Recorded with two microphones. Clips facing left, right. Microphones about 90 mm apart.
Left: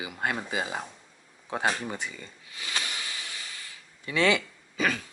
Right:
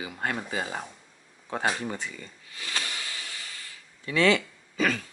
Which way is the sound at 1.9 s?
10° left (ahead or behind).